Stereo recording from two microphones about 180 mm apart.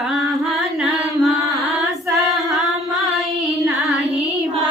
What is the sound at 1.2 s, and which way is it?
Music, centre (ahead or behind).